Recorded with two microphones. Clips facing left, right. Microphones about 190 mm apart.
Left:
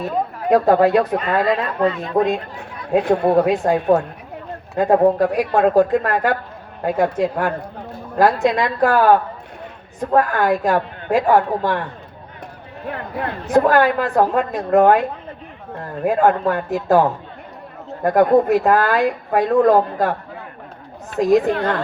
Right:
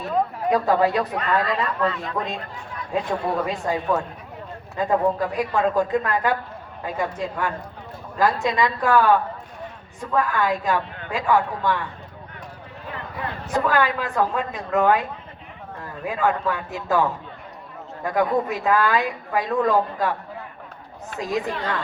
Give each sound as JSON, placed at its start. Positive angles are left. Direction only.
{"t": 0.5, "sound": "a woman's voice", "side_deg": 55}
{"t": 18.0, "sound": "a woman's voice", "side_deg": 50}
{"t": 21.2, "sound": "speech", "side_deg": 55}